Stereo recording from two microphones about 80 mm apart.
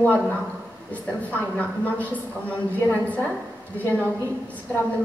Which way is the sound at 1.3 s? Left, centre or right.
Left.